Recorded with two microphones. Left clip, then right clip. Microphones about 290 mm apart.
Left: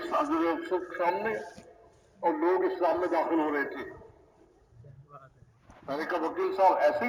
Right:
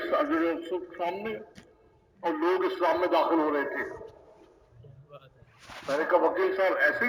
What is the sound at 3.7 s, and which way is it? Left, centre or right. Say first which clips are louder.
Speech: right 6 dB; right.